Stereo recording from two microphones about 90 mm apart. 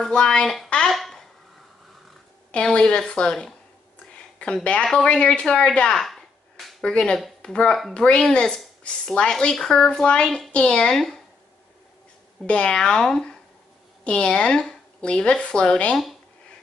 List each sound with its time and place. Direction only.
0.0 s speech: 10° left (ahead or behind)
0.9 s a sound: centre (ahead or behind)
2.5 s speech: 10° left (ahead or behind)
12.4 s speech: 10° left (ahead or behind)